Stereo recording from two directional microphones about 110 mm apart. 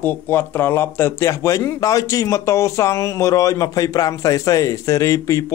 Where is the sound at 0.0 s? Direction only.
20° left (ahead or behind).